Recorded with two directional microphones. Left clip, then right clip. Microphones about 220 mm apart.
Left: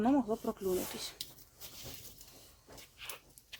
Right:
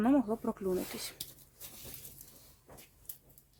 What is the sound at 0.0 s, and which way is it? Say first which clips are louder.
Speech: right 1 dB; 25° right (ahead or behind).